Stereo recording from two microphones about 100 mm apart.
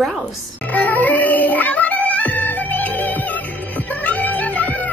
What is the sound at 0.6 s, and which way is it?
Music, 15° left (ahead or behind).